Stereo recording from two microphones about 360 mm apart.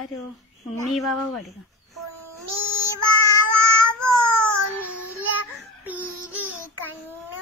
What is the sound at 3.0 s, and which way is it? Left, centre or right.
Child singing, right.